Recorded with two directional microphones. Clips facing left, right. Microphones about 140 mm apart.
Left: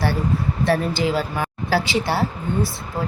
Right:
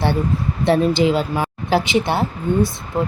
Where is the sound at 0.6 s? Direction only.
20° right (ahead or behind).